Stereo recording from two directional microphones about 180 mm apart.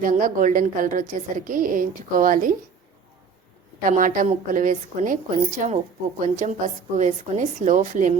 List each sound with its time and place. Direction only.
0.0 s a woman's voice: 50° right (ahead or behind)
3.8 s a woman's voice: 50° right (ahead or behind)